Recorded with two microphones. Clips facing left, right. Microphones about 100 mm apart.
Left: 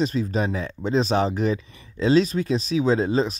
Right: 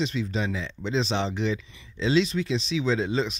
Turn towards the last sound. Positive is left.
turn(degrees=40)  # may be behind; listen again after turning